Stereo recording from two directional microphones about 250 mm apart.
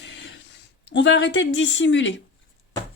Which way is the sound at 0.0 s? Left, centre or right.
Left.